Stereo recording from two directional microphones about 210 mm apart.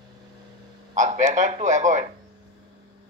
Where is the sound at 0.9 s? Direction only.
35° right (ahead or behind).